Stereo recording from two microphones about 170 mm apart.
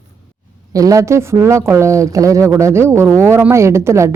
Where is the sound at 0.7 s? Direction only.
20° right (ahead or behind).